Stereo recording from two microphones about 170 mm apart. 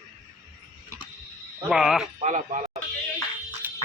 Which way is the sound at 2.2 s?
45° right (ahead or behind).